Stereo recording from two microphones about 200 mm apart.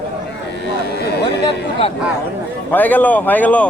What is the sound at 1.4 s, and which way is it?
Speech, 25° left (ahead or behind).